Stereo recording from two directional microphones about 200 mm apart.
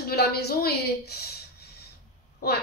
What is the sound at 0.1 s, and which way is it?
A woman's voice, 50° left (ahead or behind).